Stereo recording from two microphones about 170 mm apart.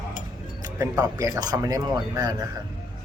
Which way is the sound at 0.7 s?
20° right (ahead or behind).